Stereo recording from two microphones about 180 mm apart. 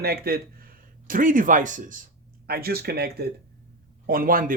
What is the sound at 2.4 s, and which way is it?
A man's voice, 60° right (ahead or behind).